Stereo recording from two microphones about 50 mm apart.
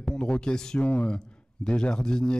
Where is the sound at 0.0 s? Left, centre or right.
Centre.